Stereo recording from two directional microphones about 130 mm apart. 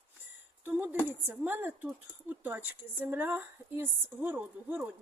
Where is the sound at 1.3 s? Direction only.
15° right (ahead or behind).